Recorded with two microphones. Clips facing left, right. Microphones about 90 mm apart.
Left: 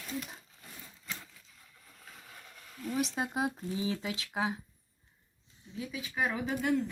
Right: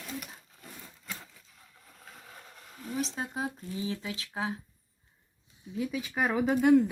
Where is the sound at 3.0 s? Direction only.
15° left (ahead or behind).